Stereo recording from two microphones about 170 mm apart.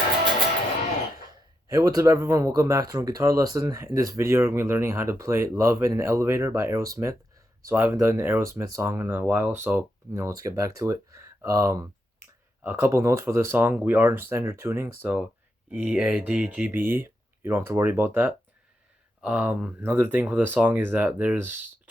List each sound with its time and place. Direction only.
1.3 s speech: 20° right (ahead or behind)